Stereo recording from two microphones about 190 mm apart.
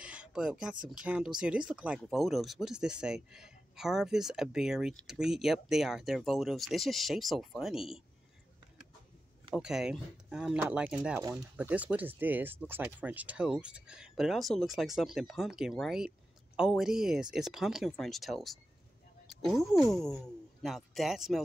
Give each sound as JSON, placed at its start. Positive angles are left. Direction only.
{"t": 0.0, "sound": "a sound", "side_deg": -5}
{"t": 0.8, "sound": "speech", "side_deg": -5}
{"t": 9.6, "sound": "speech", "side_deg": -5}